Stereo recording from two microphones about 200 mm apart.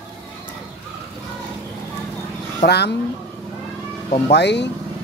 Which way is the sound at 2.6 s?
55° left (ahead or behind).